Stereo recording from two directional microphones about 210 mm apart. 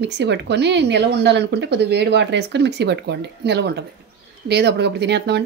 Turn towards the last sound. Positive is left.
turn(degrees=-55)  # may be behind; listen again after turning